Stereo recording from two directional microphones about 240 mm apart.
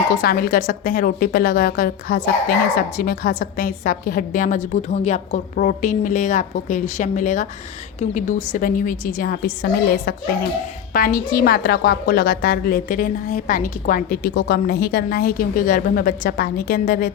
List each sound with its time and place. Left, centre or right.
0.2 s a woman's voice: left